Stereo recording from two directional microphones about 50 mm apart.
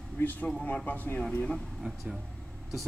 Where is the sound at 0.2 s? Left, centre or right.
Left.